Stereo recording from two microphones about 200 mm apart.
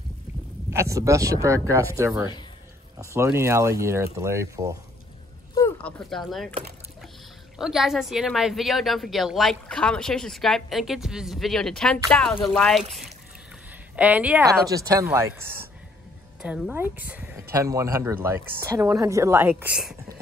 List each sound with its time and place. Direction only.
0.7 s speech: 15° right (ahead or behind)
5.8 s speech: 5° left (ahead or behind)
7.5 s speech: centre (ahead or behind)
14.7 s speech: 15° right (ahead or behind)
19.5 s speech: 5° right (ahead or behind)